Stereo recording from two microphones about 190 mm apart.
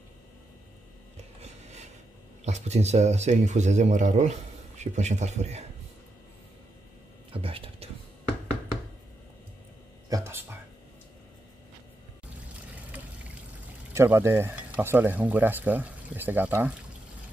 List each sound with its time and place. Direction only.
1.1 s a sound: 35° right (ahead or behind)
2.4 s a man's voice: 35° right (ahead or behind)
7.3 s whispering: 30° right (ahead or behind)
10.0 s a sound: 15° right (ahead or behind)
12.9 s water: 10° right (ahead or behind)
13.9 s speech: 15° right (ahead or behind)